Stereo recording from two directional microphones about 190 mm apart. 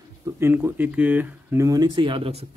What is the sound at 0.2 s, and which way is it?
Speech, 10° right (ahead or behind).